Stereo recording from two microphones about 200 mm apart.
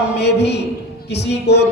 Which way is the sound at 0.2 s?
55° left (ahead or behind).